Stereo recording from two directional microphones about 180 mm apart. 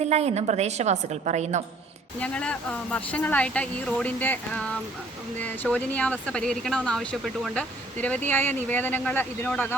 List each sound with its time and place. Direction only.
0.0 s a woman's voice: 35° right (ahead or behind)
2.1 s speech: 5° left (ahead or behind)